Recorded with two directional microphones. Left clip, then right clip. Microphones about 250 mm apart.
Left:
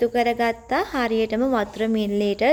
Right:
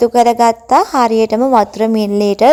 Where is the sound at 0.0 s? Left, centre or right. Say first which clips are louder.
Right 11 dB; right.